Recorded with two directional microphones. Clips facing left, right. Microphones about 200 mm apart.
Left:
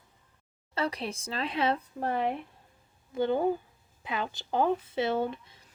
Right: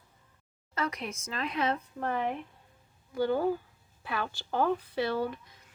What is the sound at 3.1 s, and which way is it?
Speech, 20° left (ahead or behind).